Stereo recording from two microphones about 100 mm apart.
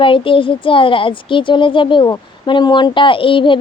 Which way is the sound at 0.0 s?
60° left (ahead or behind).